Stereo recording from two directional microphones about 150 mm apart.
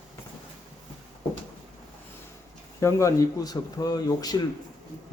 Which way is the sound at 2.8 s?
20° left (ahead or behind).